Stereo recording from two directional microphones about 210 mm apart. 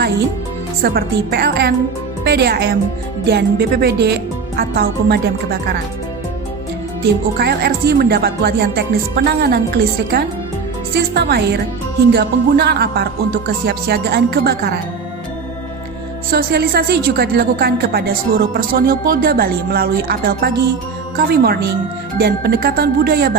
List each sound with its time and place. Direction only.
0.8 s a woman's voice: 45° right (ahead or behind)
7.0 s a woman's voice: 50° right (ahead or behind)
16.3 s a woman's voice: 50° right (ahead or behind)